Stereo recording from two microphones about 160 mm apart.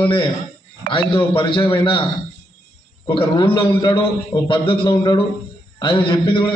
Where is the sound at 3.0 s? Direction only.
30° left (ahead or behind).